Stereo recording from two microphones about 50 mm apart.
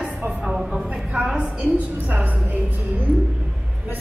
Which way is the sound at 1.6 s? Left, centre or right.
Right.